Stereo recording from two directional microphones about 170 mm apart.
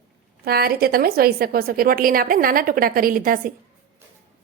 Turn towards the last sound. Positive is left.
turn(degrees=-55)  # may be behind; listen again after turning